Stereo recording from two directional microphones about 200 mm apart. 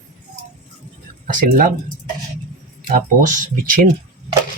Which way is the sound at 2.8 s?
40° right (ahead or behind).